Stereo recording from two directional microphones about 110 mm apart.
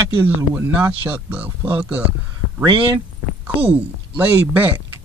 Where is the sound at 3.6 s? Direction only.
15° right (ahead or behind).